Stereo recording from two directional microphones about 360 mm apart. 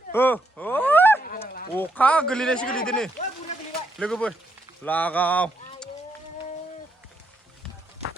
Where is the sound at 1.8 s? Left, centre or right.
Centre.